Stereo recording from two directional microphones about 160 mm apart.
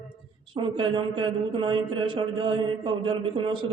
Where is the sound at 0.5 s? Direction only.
30° right (ahead or behind).